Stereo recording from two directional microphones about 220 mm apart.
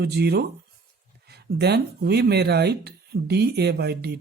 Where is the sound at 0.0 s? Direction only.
50° right (ahead or behind).